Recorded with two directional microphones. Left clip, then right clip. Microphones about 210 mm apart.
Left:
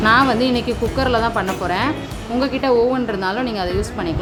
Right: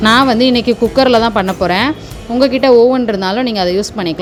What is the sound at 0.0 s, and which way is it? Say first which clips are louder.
A woman's voice: right 5 dB; 35° right (ahead or behind).